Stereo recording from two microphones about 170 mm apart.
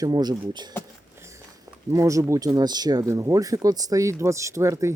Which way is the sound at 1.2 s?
15° right (ahead or behind).